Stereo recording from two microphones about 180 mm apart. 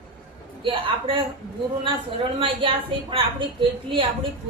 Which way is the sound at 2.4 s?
30° right (ahead or behind).